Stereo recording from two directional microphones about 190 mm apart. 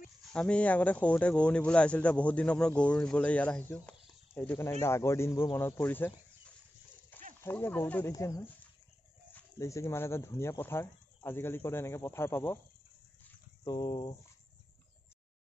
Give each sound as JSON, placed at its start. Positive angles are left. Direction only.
{"t": 0.3, "sound": "speech", "side_deg": 5}
{"t": 7.4, "sound": "speech", "side_deg": 10}
{"t": 13.7, "sound": "speech", "side_deg": 20}